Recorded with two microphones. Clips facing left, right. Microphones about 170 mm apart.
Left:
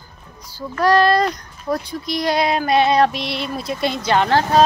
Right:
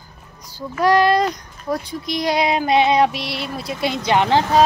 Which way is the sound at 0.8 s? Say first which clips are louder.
Even; 15° right (ahead or behind).